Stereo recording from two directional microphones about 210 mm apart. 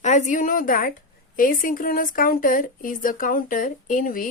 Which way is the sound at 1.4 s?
40° left (ahead or behind).